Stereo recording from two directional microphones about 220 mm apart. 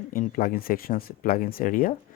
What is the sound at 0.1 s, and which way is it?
Speech, 40° left (ahead or behind).